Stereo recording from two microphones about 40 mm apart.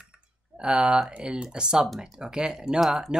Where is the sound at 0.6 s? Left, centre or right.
Right.